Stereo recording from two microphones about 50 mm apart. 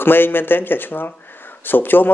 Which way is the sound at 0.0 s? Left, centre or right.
Left.